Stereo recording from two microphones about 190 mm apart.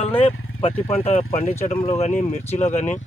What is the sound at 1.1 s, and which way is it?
Speech, 35° left (ahead or behind).